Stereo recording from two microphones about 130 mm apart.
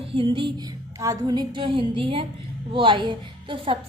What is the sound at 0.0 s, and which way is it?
A woman's voice, 45° right (ahead or behind).